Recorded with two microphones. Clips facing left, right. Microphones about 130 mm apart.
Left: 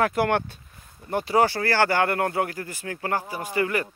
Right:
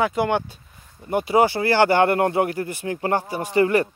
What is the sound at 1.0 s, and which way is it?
Speech, 15° right (ahead or behind).